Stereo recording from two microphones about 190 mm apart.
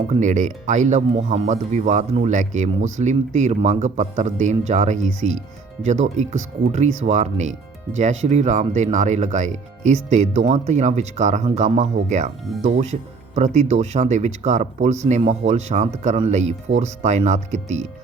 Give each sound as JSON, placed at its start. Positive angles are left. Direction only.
{"t": 0.1, "sound": "speech", "side_deg": -40}